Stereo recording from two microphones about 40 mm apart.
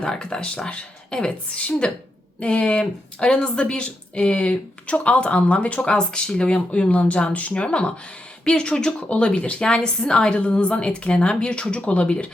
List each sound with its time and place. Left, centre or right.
0.0 s a woman's voice: centre; by 7.5 s left
7.5 s speech: left